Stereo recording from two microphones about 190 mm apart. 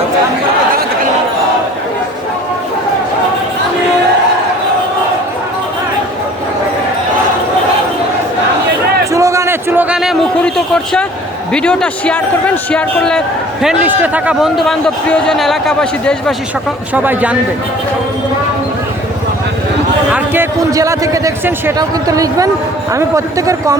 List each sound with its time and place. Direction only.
9.1 s a sound: 15° right (ahead or behind)
11.5 s a man's voice: 5° left (ahead or behind)
16.9 s a man's voice: 10° right (ahead or behind)
20.1 s a man's voice: 10° right (ahead or behind)